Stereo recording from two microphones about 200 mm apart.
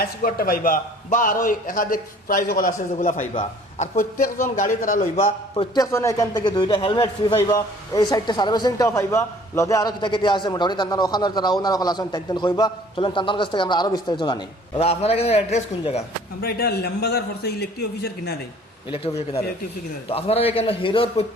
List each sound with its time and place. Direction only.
0.0 s a man's voice: 45° left (ahead or behind)
16.4 s a man's voice: 50° left (ahead or behind)
18.9 s a man's voice: 30° left (ahead or behind)